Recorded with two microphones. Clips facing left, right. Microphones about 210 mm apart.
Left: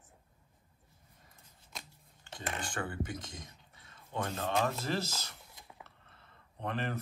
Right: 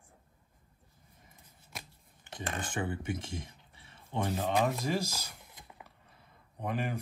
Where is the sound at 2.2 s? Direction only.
20° right (ahead or behind).